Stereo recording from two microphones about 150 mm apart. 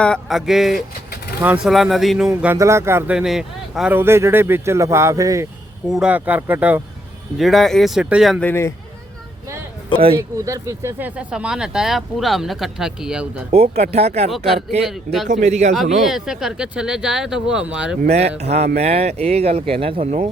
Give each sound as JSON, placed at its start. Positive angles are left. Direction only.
{"t": 0.0, "sound": "speech", "side_deg": 5}
{"t": 2.3, "sound": "speech", "side_deg": -15}
{"t": 3.2, "sound": "speech", "side_deg": -5}
{"t": 3.9, "sound": "speech", "side_deg": -15}
{"t": 5.9, "sound": "speech", "side_deg": -5}
{"t": 7.3, "sound": "speech", "side_deg": 0}
{"t": 8.4, "sound": "a man's voice", "side_deg": 15}
{"t": 10.2, "sound": "speech", "side_deg": -20}
{"t": 13.5, "sound": "speech", "side_deg": -45}
{"t": 14.3, "sound": "speech", "side_deg": 0}
{"t": 15.3, "sound": "speech", "side_deg": -50}
{"t": 16.0, "sound": "speech", "side_deg": -5}
{"t": 18.1, "sound": "speech", "side_deg": -45}